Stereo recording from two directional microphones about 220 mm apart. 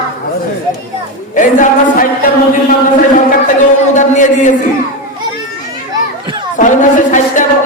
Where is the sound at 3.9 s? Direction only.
35° left (ahead or behind).